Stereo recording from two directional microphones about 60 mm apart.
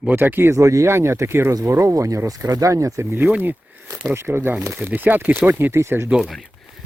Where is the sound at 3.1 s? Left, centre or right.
Right.